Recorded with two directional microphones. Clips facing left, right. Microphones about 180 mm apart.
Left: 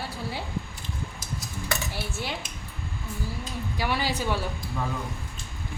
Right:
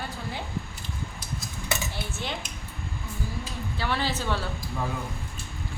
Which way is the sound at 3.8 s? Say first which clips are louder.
Left 1 dB; 10° left (ahead or behind).